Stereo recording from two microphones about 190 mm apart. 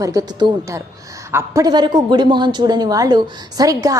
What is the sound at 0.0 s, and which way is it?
A woman's voice, 20° right (ahead or behind).